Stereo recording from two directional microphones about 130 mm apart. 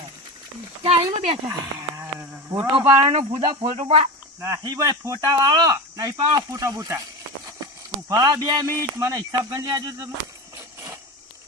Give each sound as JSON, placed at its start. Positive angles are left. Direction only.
{"t": 0.8, "sound": "speech", "side_deg": -40}
{"t": 1.5, "sound": "insect", "side_deg": -20}
{"t": 2.7, "sound": "speech", "side_deg": -40}
{"t": 3.8, "sound": "speech", "side_deg": -50}
{"t": 4.4, "sound": "speech", "side_deg": -30}
{"t": 8.0, "sound": "speech", "side_deg": -25}